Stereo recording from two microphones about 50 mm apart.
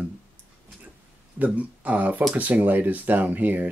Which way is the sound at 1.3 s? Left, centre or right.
Right.